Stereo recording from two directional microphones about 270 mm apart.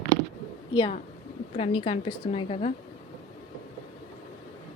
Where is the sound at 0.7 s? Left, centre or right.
Centre.